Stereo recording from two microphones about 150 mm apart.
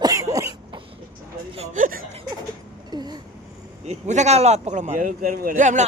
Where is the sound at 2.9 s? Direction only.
30° right (ahead or behind).